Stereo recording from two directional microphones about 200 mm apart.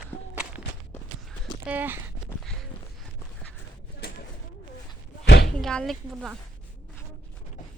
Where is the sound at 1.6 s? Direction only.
10° right (ahead or behind).